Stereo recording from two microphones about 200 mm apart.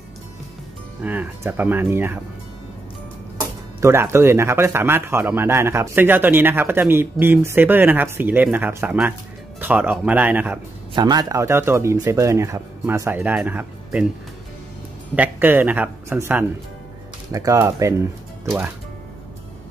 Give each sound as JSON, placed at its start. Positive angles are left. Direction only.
{"t": 1.0, "sound": "speech", "side_deg": -10}
{"t": 3.3, "sound": "speech", "side_deg": -10}
{"t": 11.0, "sound": "speech", "side_deg": -20}
{"t": 15.1, "sound": "speech", "side_deg": -10}